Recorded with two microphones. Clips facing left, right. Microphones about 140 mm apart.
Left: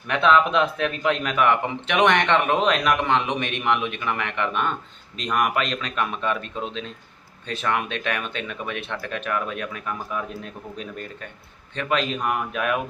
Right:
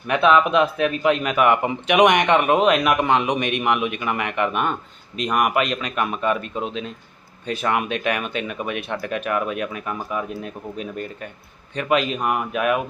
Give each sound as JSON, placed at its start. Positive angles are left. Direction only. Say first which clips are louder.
{"t": 0.1, "sound": "speech", "louder": "right 2 dB", "side_deg": -5}